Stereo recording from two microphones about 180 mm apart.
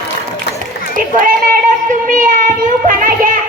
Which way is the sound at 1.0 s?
50° right (ahead or behind).